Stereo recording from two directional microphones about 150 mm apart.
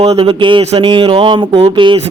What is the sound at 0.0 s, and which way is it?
Speech, 40° right (ahead or behind).